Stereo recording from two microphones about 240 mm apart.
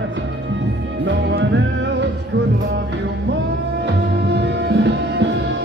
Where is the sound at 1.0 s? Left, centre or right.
Right.